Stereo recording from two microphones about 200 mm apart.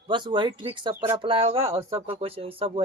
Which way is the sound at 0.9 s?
10° right (ahead or behind).